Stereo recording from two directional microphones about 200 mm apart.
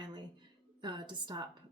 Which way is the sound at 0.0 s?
20° right (ahead or behind).